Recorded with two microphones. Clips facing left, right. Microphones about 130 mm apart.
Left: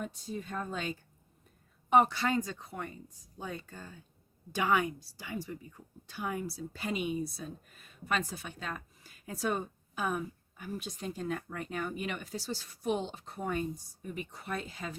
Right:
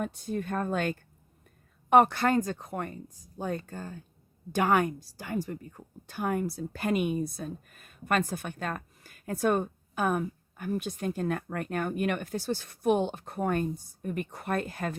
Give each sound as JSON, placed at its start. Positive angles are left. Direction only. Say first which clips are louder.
{"t": 0.0, "sound": "a woman's voice", "louder": "right 7 dB", "side_deg": -60}